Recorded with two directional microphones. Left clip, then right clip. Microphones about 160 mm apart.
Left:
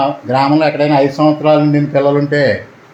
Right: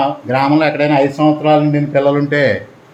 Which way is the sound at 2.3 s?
20° left (ahead or behind).